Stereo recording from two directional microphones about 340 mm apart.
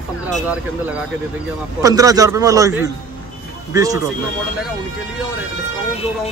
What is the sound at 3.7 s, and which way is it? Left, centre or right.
Speech, centre.